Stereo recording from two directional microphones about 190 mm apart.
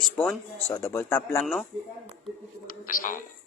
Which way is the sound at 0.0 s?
Centre (ahead or behind).